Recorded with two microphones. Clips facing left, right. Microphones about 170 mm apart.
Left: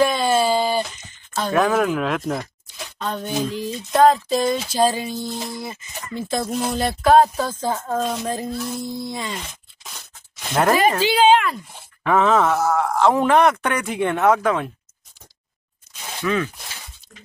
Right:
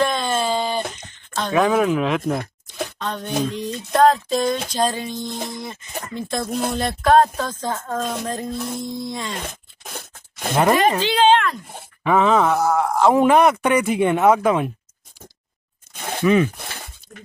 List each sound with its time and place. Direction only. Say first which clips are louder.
0.0 s a sound: left 3 dB; 5° left (ahead or behind)
1.3 s speech: right 1 dB; 5° left (ahead or behind)
4.6 s music: left 3 dB; 5° left (ahead or behind)
5.5 s speech: right 1 dB; 5° left (ahead or behind)
8.5 s speech: even; 55° right (ahead or behind)
8.8 s speech: even; 5° left (ahead or behind)
9.3 s a sound: right 2 dB; 55° right (ahead or behind)
10.5 s speech: right 1 dB; centre (ahead or behind)
15.9 s a sound: right 6 dB; 55° right (ahead or behind)